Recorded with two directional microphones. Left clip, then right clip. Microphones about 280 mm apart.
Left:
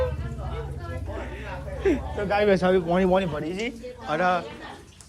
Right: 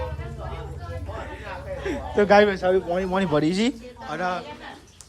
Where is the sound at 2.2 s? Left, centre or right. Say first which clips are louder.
Right 10 dB; centre.